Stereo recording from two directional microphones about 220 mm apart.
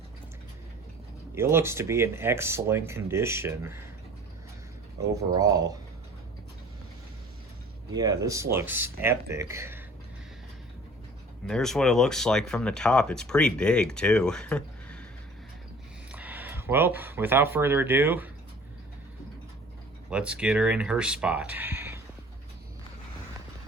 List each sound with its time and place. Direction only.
1.4 s speech: 10° right (ahead or behind)
5.1 s speech: 15° right (ahead or behind)
7.9 s speech: 15° right (ahead or behind)
11.4 s speech: centre (ahead or behind)
16.1 s speech: 10° right (ahead or behind)
20.1 s speech: 5° right (ahead or behind)